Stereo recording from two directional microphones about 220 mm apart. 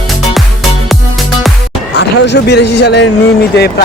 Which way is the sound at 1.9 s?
50° left (ahead or behind).